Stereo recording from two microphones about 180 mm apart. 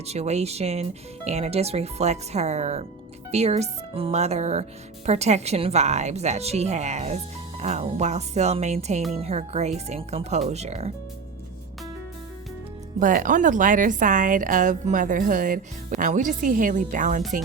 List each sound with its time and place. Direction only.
0.0 s speech: 35° right (ahead or behind)
13.0 s speech: 45° right (ahead or behind)